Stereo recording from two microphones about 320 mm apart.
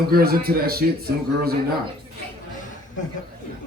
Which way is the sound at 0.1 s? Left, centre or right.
Right.